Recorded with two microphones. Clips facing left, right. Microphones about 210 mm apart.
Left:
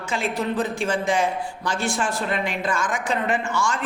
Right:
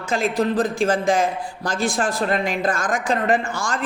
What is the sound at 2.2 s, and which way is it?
Speech, 40° right (ahead or behind).